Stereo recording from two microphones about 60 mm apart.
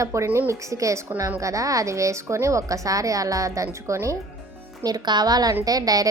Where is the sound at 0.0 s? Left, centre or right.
Right.